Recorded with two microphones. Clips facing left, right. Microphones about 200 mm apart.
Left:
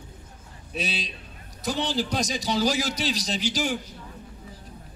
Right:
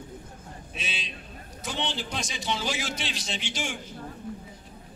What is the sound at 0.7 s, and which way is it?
A man's voice, 40° left (ahead or behind).